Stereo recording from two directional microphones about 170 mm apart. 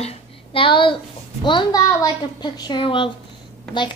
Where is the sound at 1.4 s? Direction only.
25° left (ahead or behind).